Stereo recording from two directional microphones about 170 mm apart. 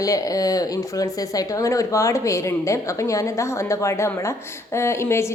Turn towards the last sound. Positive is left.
turn(degrees=15)  # may be behind; listen again after turning